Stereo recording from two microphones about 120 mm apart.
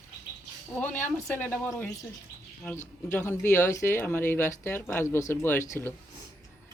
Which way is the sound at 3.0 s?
20° left (ahead or behind).